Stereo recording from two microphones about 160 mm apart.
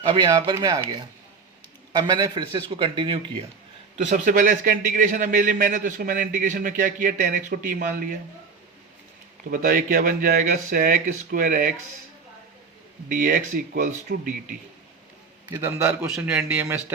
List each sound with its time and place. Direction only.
0.1 s speech: 25° right (ahead or behind)
1.9 s a man's voice: 25° right (ahead or behind)
3.9 s a man's voice: 55° right (ahead or behind)
9.5 s a man's voice: 55° right (ahead or behind)
13.1 s speech: 55° right (ahead or behind)
15.6 s a man's voice: 15° right (ahead or behind)